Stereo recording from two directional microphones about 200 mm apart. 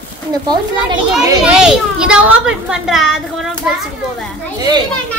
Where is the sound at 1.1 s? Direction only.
5° right (ahead or behind).